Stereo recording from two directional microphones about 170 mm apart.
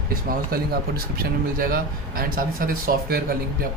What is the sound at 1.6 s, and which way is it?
Speech, 60° right (ahead or behind).